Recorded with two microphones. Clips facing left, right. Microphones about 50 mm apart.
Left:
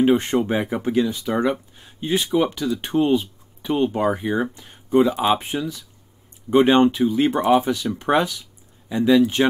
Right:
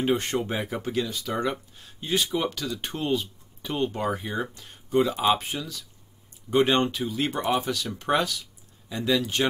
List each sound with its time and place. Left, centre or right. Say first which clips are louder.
0.0 s speech: left 7 dB; centre
5.1 s speech: left 3 dB; centre
5.4 s speech: left 7 dB; left